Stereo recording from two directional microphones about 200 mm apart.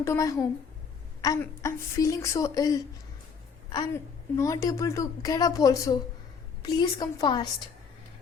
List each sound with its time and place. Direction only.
0.0 s a woman's voice: 15° left (ahead or behind)